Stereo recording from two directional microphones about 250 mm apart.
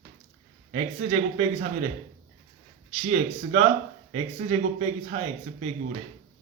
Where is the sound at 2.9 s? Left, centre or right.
Right.